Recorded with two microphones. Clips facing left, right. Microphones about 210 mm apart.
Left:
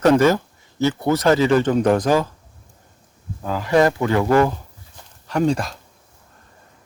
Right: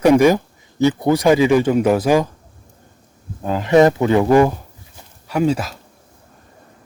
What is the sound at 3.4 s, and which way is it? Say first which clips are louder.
Speech: right 4 dB; 20° right (ahead or behind).